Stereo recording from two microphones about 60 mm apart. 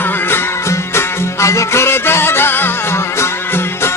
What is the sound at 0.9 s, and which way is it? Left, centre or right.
Music, left.